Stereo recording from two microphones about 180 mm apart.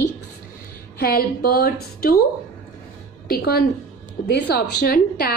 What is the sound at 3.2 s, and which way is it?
A woman's voice, 60° left (ahead or behind).